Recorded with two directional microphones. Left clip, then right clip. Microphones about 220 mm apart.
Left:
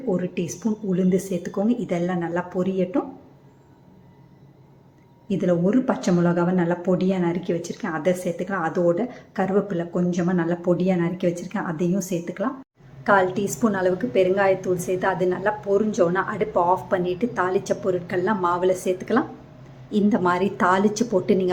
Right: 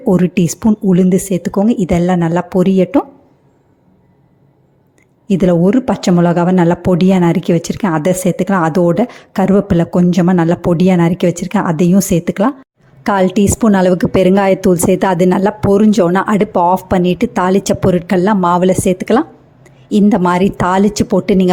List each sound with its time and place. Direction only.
0.1 s speech: 45° right (ahead or behind)
5.3 s a woman's voice: 40° right (ahead or behind)